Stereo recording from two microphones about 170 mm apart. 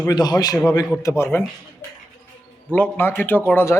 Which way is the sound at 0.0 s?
20° left (ahead or behind).